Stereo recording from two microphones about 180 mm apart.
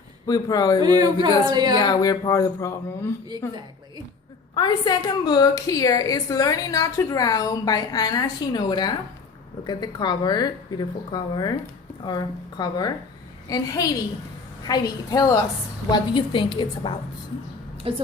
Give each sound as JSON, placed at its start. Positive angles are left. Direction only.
{"t": 0.3, "sound": "a woman's voice", "side_deg": 20}
{"t": 0.8, "sound": "speech", "side_deg": -20}
{"t": 1.8, "sound": "a woman's voice", "side_deg": 20}
{"t": 4.5, "sound": "a woman's voice", "side_deg": 25}
{"t": 17.9, "sound": "a woman's voice", "side_deg": -30}